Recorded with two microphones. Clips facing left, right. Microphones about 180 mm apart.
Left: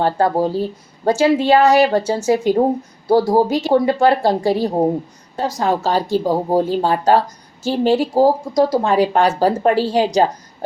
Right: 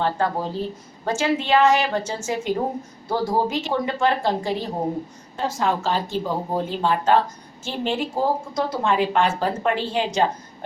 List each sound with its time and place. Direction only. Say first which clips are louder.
0.0 s speech: left 7 dB; 40° left (ahead or behind)